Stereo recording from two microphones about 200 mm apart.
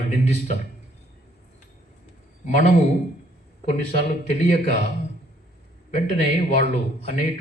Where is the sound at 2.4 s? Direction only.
35° left (ahead or behind).